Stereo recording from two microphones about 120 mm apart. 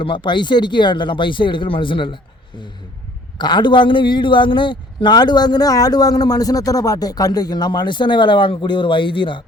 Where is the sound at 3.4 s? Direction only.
40° left (ahead or behind).